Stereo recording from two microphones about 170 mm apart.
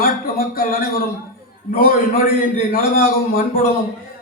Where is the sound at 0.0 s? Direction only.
60° left (ahead or behind).